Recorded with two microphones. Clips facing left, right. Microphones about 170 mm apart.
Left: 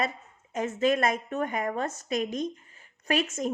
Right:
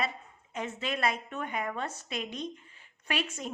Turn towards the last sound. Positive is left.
turn(degrees=45)  # may be behind; listen again after turning